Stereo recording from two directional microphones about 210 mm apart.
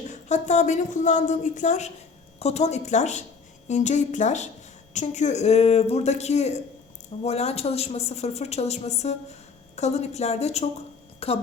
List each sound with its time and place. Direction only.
0.1 s a woman's voice: 35° left (ahead or behind)